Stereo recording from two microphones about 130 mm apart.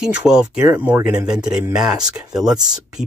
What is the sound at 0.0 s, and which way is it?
Speech, 5° right (ahead or behind).